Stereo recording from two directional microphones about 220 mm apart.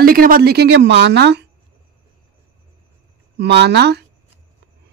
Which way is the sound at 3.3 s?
50° right (ahead or behind).